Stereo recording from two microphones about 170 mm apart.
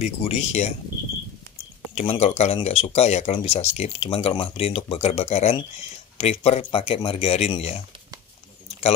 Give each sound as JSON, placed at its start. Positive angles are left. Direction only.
{"t": 0.0, "sound": "speech", "side_deg": 40}
{"t": 2.0, "sound": "speech", "side_deg": 35}